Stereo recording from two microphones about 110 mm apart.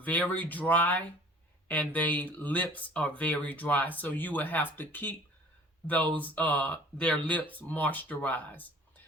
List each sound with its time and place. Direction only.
0.0 s speech: 15° left (ahead or behind)
6.1 s speech: 15° left (ahead or behind)